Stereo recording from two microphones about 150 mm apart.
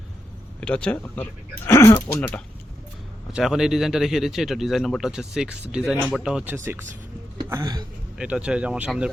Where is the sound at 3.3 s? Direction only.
5° right (ahead or behind).